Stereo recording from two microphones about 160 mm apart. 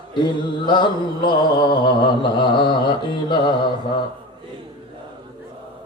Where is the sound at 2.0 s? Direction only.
30° left (ahead or behind).